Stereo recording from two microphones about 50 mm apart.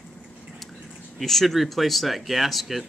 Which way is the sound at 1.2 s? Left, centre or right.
Centre.